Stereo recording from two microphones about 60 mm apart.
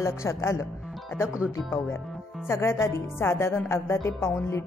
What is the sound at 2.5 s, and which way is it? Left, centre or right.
A woman's voice, left.